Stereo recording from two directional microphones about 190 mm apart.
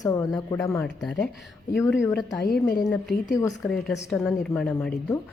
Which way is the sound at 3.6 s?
Centre (ahead or behind).